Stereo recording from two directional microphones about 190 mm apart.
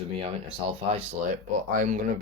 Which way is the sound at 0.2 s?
30° right (ahead or behind).